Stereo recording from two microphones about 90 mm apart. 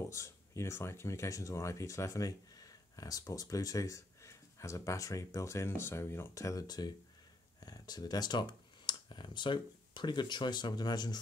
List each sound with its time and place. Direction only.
0.1 s speech: 30° left (ahead or behind); by 11.1 s 50° left (ahead or behind)